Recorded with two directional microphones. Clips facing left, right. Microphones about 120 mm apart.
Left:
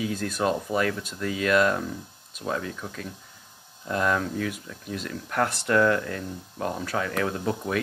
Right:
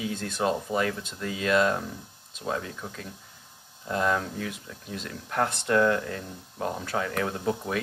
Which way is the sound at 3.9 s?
20° right (ahead or behind).